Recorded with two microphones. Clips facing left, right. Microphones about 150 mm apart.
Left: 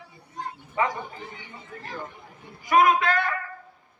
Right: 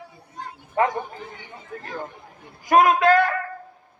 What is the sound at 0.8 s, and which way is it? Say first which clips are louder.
Speech: right 5 dB; 45° right (ahead or behind).